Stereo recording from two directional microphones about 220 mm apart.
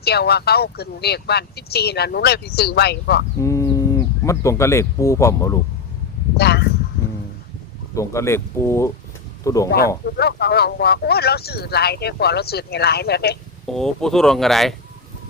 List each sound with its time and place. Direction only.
0.0 s speech: 45° left (ahead or behind)
3.4 s speech: 15° left (ahead or behind)
6.3 s speech: 45° left (ahead or behind)
7.9 s speech: 15° left (ahead or behind)
10.1 s speech: 45° left (ahead or behind)
13.7 s speech: centre (ahead or behind)